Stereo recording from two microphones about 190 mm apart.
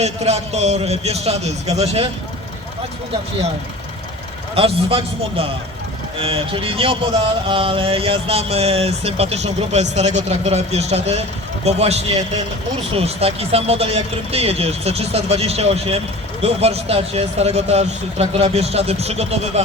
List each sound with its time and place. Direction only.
0.0 s speech: 35° right (ahead or behind)
4.5 s speech: 30° right (ahead or behind)
6.1 s speech: 30° right (ahead or behind)